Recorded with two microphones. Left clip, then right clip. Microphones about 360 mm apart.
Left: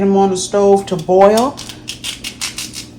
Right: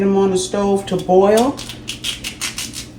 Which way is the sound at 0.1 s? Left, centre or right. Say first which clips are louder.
Left 3 dB; centre.